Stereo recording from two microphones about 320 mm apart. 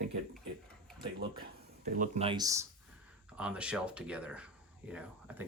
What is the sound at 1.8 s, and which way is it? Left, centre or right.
Speech, right.